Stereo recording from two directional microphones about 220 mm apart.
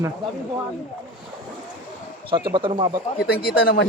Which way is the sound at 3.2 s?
45° left (ahead or behind).